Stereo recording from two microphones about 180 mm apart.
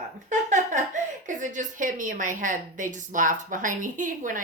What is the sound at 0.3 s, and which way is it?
A woman's voice, 45° right (ahead or behind).